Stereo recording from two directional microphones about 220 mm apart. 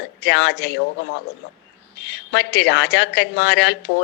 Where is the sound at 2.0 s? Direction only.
50° left (ahead or behind).